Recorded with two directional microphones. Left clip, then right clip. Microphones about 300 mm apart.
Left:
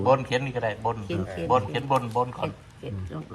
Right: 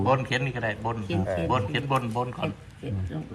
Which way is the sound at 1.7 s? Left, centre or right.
Left.